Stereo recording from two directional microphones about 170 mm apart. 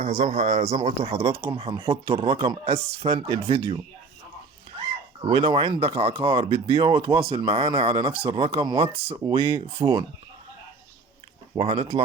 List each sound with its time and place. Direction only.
0.0 s speech: 40° right (ahead or behind)
5.2 s speech: 30° right (ahead or behind)
11.5 s speech: 30° right (ahead or behind)